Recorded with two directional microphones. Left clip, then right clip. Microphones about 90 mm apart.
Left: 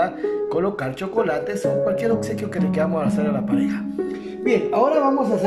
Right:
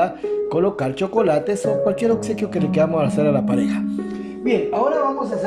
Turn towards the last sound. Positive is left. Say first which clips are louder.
# right 4 dB
turn(degrees=-45)  # may be behind; listen again after turning